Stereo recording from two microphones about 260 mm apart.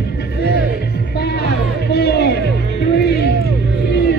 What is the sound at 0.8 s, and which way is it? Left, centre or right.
Music, left.